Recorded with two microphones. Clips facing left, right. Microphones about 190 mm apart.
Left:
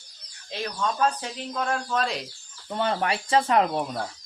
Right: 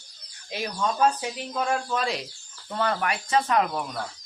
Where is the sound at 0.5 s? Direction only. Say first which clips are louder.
Right 1 dB; 10° right (ahead or behind).